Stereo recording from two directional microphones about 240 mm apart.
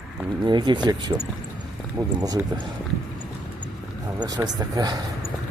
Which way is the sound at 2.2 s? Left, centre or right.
Centre.